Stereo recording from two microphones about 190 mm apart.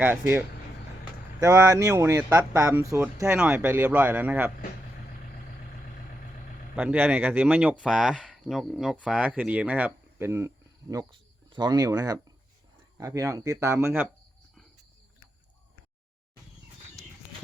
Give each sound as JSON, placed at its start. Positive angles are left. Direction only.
{"t": 0.0, "sound": "speech", "side_deg": -10}
{"t": 6.7, "sound": "speech", "side_deg": -10}